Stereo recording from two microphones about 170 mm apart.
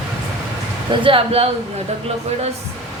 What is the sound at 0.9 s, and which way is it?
Speech, 30° right (ahead or behind).